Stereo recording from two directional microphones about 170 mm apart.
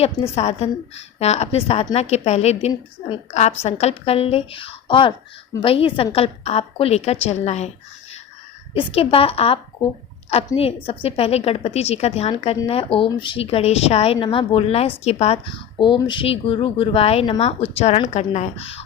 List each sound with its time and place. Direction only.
0.0 s a woman's voice: 35° left (ahead or behind)
8.7 s a woman's voice: 35° left (ahead or behind)
15.8 s a woman's voice: 30° left (ahead or behind)